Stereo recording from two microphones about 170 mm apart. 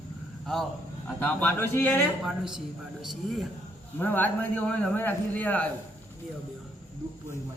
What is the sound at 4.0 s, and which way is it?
A man's voice, 10° left (ahead or behind).